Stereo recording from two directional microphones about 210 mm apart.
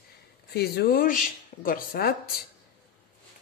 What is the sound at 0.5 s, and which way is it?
Speech, 45° left (ahead or behind).